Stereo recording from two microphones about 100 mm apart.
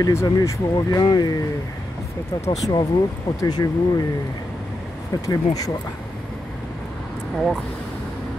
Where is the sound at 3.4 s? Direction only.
40° left (ahead or behind).